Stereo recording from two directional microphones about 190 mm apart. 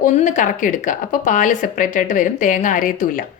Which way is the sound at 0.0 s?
40° left (ahead or behind).